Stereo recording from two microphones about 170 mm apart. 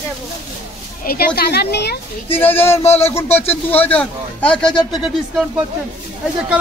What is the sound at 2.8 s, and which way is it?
Speech, 35° left (ahead or behind).